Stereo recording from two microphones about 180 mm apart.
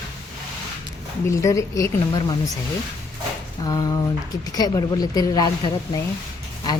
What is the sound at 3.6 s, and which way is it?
A woman's voice, 20° left (ahead or behind).